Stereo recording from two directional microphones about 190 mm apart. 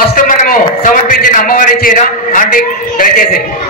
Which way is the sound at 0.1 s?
45° left (ahead or behind).